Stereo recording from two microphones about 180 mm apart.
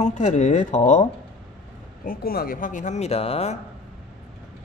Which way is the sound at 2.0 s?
55° left (ahead or behind).